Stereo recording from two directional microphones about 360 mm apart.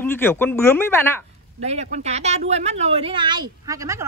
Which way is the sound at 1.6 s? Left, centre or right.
Centre.